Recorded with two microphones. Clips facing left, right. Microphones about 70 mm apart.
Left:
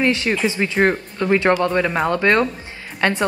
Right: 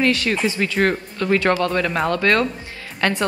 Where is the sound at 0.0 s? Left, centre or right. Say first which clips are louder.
Left 1 dB; left.